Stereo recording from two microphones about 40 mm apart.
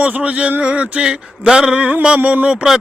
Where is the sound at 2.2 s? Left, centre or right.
Right.